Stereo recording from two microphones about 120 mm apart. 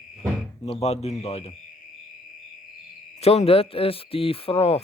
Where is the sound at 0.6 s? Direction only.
60° left (ahead or behind).